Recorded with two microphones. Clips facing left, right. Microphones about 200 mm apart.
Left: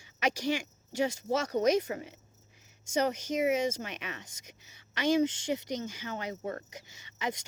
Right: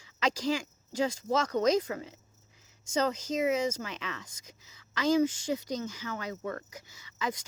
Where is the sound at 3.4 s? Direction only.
20° left (ahead or behind).